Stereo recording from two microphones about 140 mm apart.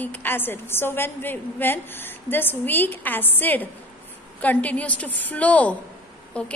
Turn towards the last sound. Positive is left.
turn(degrees=10)  # may be behind; listen again after turning